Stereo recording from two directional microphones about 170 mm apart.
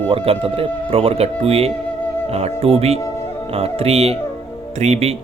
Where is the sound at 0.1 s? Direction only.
35° right (ahead or behind).